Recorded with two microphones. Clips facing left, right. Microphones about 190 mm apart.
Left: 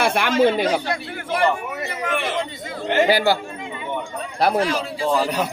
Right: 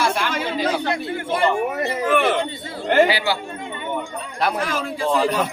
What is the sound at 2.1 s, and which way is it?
Speech, 55° right (ahead or behind).